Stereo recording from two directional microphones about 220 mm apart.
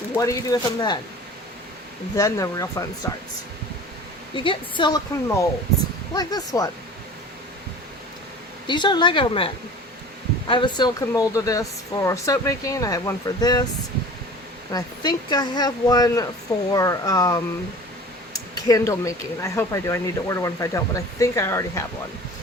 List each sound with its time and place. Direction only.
0.1 s speech: 15° left (ahead or behind)
2.1 s speech: 15° left (ahead or behind)
4.4 s speech: 20° left (ahead or behind)
8.6 s speech: 20° left (ahead or behind)
10.5 s speech: 20° left (ahead or behind)
14.7 s speech: 15° left (ahead or behind)